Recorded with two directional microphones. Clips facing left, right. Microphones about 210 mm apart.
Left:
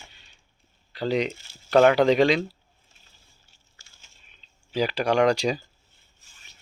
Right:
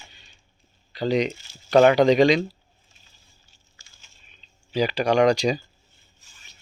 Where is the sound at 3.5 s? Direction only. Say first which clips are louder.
Right 1 dB; 60° left (ahead or behind).